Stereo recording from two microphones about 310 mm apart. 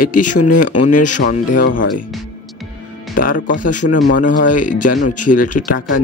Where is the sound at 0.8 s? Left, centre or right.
Left.